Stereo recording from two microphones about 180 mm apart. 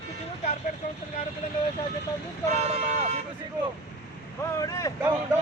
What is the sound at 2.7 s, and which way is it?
Vehicle, 40° right (ahead or behind).